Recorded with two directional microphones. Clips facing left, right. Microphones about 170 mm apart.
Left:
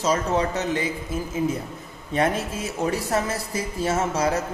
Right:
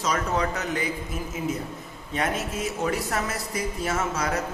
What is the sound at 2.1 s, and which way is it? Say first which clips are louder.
A man's voice: left 4 dB; 30° left (ahead or behind).